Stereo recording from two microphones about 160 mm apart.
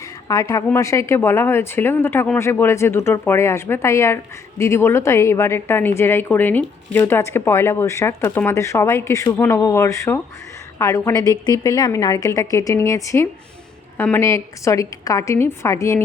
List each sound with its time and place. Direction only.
0.3 s a woman's voice: 20° left (ahead or behind)